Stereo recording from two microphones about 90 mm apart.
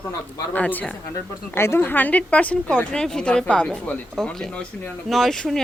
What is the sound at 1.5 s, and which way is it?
A woman's voice, 30° left (ahead or behind).